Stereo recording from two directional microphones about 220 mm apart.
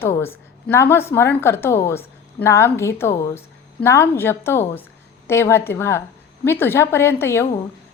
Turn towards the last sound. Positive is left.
turn(degrees=10)  # may be behind; listen again after turning